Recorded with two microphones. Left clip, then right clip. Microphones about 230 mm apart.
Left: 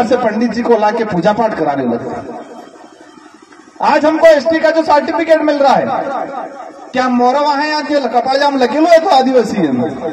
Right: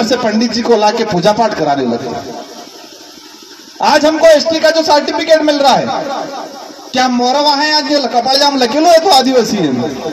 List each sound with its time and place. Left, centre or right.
0.1 s a man's voice: right
3.8 s a man's voice: right